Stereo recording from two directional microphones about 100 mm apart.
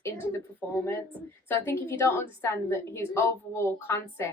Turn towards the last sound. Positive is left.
turn(degrees=30)  # may be behind; listen again after turning